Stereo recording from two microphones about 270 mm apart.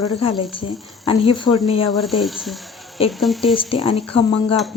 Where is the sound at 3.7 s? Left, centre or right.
Left.